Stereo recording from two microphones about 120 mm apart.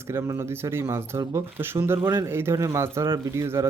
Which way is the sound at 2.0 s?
40° right (ahead or behind).